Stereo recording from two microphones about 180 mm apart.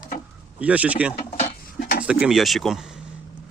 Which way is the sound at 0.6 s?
10° right (ahead or behind).